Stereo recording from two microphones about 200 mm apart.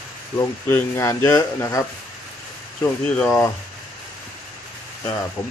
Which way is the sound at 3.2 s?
15° left (ahead or behind).